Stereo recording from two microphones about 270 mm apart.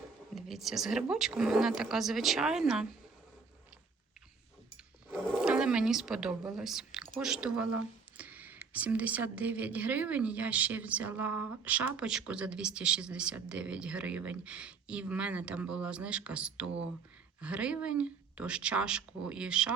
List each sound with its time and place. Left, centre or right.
0.3 s speech: centre
5.0 s a sound: centre
7.2 s speech: centre